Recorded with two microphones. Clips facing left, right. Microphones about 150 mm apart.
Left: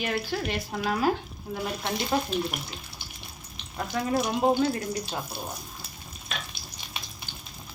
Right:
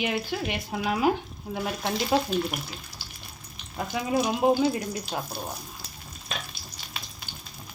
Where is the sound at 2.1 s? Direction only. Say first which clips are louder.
Right 3 dB; 15° right (ahead or behind).